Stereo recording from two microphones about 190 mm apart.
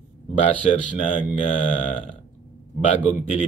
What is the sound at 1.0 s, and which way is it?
Speech, 40° left (ahead or behind).